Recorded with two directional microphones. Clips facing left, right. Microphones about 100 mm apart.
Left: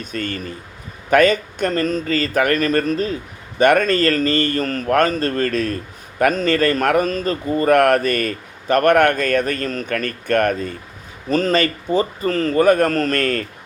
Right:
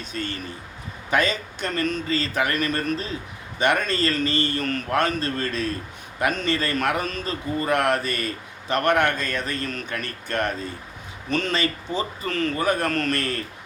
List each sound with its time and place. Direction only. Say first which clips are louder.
0.0 s a man's voice: left 5 dB; 50° left (ahead or behind)
2.0 s a man's voice: left 6 dB; 50° left (ahead or behind)
9.9 s speech: left 13 dB; 55° left (ahead or behind)
11.3 s a man's voice: left 7 dB; 40° left (ahead or behind)